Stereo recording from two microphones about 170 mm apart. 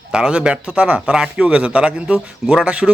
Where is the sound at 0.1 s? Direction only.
5° right (ahead or behind).